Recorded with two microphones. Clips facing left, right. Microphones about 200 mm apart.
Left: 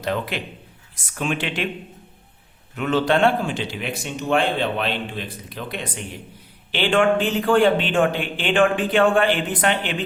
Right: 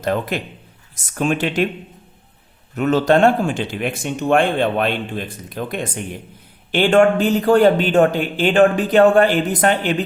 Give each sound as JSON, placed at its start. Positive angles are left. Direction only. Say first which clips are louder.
{"t": 0.0, "sound": "speech", "louder": "right 4 dB", "side_deg": -45}
{"t": 2.7, "sound": "a man's voice", "louder": "right 5 dB", "side_deg": -40}